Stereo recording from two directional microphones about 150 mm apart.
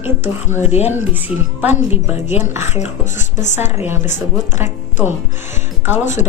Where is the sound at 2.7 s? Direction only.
55° left (ahead or behind).